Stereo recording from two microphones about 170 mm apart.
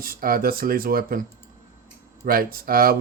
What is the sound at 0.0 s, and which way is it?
Speech, 60° right (ahead or behind).